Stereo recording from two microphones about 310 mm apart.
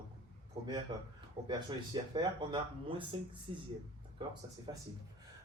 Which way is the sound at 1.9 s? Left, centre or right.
Centre.